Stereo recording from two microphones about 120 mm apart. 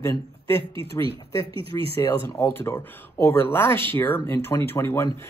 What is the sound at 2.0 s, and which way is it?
Speech, 20° left (ahead or behind).